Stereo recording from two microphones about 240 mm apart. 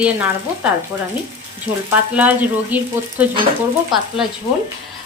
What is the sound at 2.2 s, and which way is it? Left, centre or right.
Frying, centre.